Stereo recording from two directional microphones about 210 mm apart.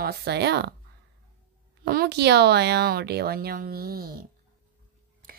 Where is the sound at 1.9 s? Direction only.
50° right (ahead or behind).